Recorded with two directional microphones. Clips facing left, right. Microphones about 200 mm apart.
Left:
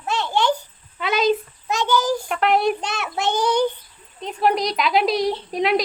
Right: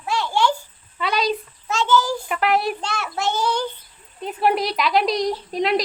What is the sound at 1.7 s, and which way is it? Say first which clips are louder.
Child singing: even; 15° left (ahead or behind).